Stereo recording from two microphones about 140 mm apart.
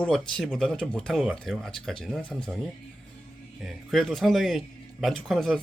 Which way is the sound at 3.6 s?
Centre (ahead or behind).